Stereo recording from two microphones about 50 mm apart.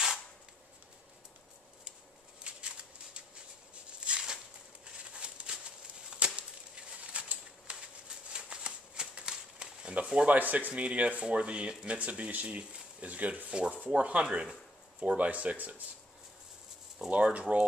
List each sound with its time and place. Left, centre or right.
2.4 s scissors: right
4.0 s a sound: centre
6.0 s chop: centre
7.1 s bird: right
8.3 s shuffling cards: centre
10.1 s speech: right
17.1 s speech: right